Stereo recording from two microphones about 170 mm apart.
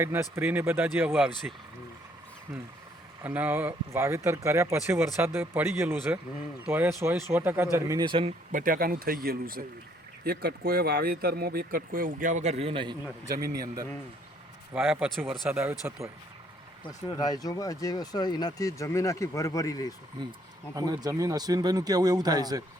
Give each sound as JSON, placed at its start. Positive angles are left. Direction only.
{"t": 0.0, "sound": "speech", "side_deg": -15}
{"t": 3.2, "sound": "speech", "side_deg": -10}
{"t": 8.5, "sound": "speech", "side_deg": -55}
{"t": 13.4, "sound": "speech", "side_deg": -65}
{"t": 14.7, "sound": "speech", "side_deg": -5}
{"t": 16.8, "sound": "speech", "side_deg": 20}
{"t": 20.7, "sound": "speech", "side_deg": -20}